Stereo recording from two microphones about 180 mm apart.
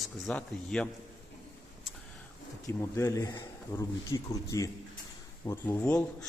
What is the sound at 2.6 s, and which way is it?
Speech, 15° left (ahead or behind).